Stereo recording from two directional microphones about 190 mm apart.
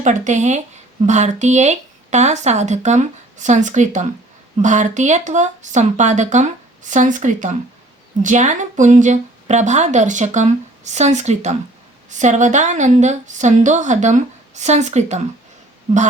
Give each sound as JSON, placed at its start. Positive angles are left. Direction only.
{"t": 0.0, "sound": "a woman's voice", "side_deg": -40}